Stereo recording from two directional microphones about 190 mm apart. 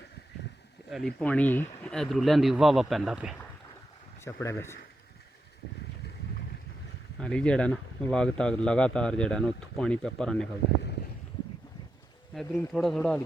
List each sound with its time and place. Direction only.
1.2 s speech: 5° left (ahead or behind)
4.2 s speech: 15° left (ahead or behind)
7.2 s speech: 5° left (ahead or behind)
12.3 s speech: centre (ahead or behind)